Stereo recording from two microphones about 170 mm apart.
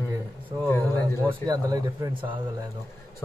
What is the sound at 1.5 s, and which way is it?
Speech, 20° right (ahead or behind).